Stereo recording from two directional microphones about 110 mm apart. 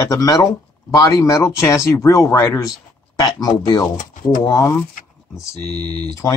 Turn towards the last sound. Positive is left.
turn(degrees=75)  # may be behind; listen again after turning